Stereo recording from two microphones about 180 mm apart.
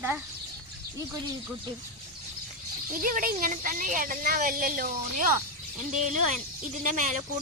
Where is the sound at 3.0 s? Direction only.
50° right (ahead or behind).